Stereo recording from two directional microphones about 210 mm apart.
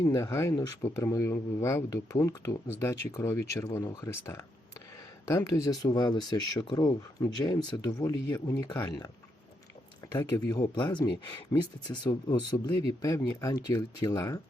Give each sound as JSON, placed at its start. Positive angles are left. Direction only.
{"t": 0.0, "sound": "speech", "side_deg": 15}
{"t": 10.1, "sound": "speech", "side_deg": 15}